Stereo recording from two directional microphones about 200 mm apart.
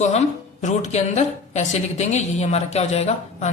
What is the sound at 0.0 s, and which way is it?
A woman's voice, 35° left (ahead or behind).